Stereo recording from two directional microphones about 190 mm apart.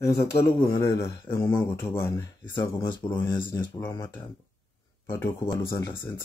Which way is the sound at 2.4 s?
25° left (ahead or behind).